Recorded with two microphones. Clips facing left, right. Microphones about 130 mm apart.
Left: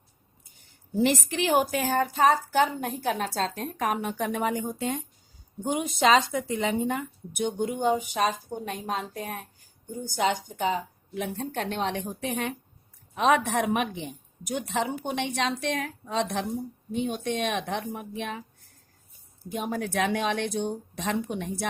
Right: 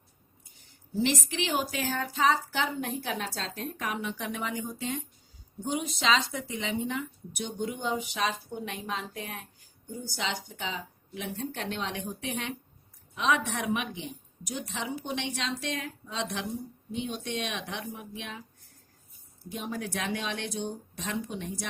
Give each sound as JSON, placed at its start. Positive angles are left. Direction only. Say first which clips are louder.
{"t": 0.9, "sound": "a woman's voice", "louder": "left 4 dB", "side_deg": 55}
{"t": 19.5, "sound": "speech", "louder": "left 5 dB", "side_deg": 50}